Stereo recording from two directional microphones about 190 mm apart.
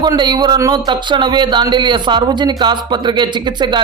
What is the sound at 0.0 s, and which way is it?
Speech, 25° right (ahead or behind).